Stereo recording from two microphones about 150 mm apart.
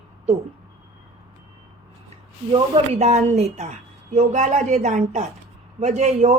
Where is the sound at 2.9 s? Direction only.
45° right (ahead or behind).